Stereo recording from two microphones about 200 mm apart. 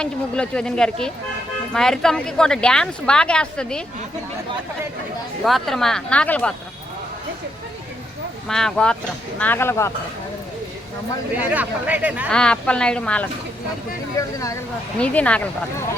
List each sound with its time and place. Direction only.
0.0 s a woman's voice: 5° left (ahead or behind)
5.5 s a woman's voice: centre (ahead or behind)
8.4 s a woman's voice: centre (ahead or behind)
11.3 s speech: 10° right (ahead or behind)
12.3 s a woman's voice: 5° left (ahead or behind)
14.2 s speech: 15° left (ahead or behind)